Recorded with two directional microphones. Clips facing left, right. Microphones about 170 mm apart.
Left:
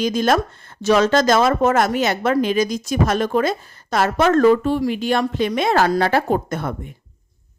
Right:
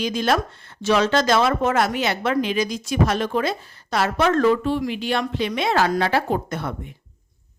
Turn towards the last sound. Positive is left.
turn(degrees=50)  # may be behind; listen again after turning